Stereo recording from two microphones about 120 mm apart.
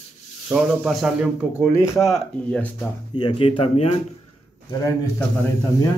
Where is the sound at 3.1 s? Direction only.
45° left (ahead or behind).